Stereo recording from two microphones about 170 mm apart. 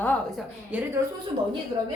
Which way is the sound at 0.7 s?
10° right (ahead or behind).